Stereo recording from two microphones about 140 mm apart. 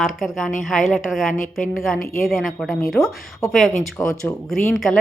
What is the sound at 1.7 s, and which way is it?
A woman's voice, centre (ahead or behind).